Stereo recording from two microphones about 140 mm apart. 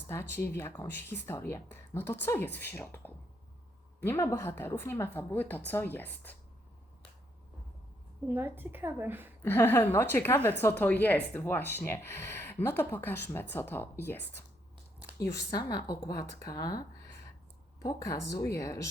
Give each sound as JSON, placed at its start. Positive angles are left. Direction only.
{"t": 0.1, "sound": "a woman's voice", "side_deg": 15}
{"t": 8.3, "sound": "a woman's voice", "side_deg": -15}
{"t": 9.4, "sound": "a woman's voice", "side_deg": 15}
{"t": 15.5, "sound": "speech", "side_deg": 25}
{"t": 17.8, "sound": "speech", "side_deg": 25}